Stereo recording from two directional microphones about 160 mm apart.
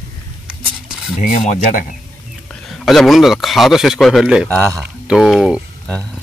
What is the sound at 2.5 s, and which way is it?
A man's voice, centre (ahead or behind).